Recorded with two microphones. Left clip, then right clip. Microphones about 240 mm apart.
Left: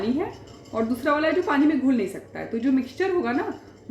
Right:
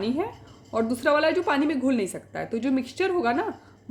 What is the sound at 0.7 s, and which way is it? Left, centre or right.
A woman's voice, right.